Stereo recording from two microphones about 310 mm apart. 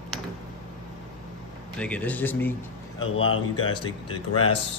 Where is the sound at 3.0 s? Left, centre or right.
Left.